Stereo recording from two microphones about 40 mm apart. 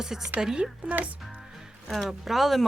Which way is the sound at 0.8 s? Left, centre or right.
Right.